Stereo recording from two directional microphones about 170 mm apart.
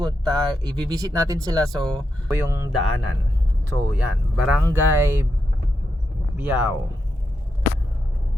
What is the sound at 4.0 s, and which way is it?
Speech, 5° right (ahead or behind).